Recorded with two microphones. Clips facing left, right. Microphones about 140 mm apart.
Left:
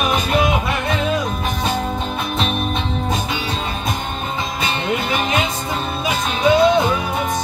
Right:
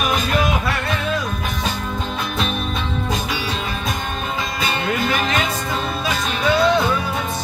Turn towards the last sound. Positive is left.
turn(degrees=20)  # may be behind; listen again after turning